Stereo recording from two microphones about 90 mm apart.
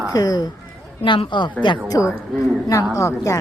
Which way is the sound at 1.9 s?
35° left (ahead or behind).